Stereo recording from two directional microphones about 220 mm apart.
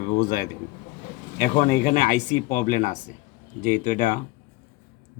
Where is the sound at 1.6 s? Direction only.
40° left (ahead or behind).